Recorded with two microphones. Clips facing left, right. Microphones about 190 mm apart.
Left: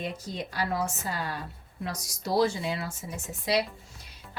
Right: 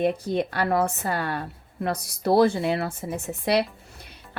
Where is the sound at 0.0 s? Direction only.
60° right (ahead or behind).